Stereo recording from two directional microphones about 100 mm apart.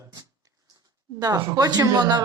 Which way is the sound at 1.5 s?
40° right (ahead or behind).